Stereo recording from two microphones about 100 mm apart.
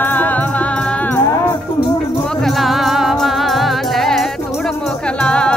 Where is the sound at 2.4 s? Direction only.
Centre (ahead or behind).